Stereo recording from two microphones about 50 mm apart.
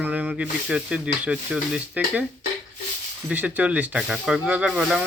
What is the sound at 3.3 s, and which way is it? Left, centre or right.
Speech, right.